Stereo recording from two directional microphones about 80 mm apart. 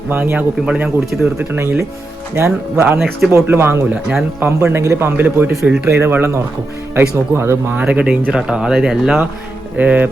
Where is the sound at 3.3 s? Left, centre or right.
Right.